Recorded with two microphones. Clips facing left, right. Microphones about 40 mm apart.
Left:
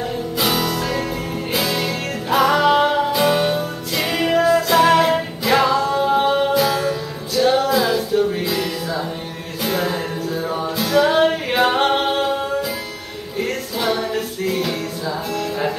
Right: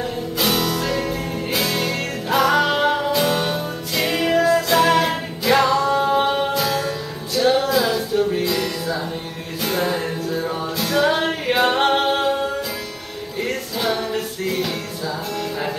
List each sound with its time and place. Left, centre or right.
0.4 s music: centre